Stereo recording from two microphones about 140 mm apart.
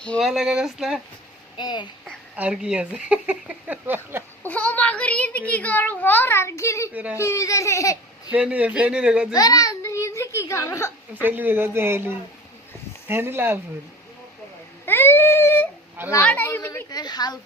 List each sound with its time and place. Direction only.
0.0 s a child's voice: 10° left (ahead or behind)
0.3 s speech: 5° right (ahead or behind)
1.5 s speech: 30° left (ahead or behind)
2.3 s speech: 10° right (ahead or behind)
4.4 s a child's voice: 10° left (ahead or behind)
6.9 s speech: 10° right (ahead or behind)
7.2 s speech: 20° left (ahead or behind)
8.3 s speech: 10° right (ahead or behind)
9.3 s a sound: 25° left (ahead or behind)
11.1 s speech: 15° right (ahead or behind)
14.8 s a child's voice: 15° left (ahead or behind)
16.9 s speech: 30° left (ahead or behind)